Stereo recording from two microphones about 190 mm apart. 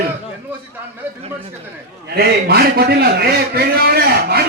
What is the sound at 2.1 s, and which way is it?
A man's voice, 55° right (ahead or behind).